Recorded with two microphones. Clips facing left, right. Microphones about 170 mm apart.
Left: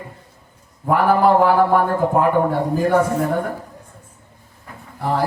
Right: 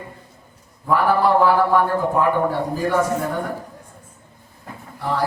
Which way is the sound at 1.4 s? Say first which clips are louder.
Left 1 dB; 55° left (ahead or behind).